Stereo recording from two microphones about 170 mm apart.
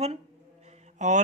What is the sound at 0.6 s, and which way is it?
Mantra, 45° right (ahead or behind).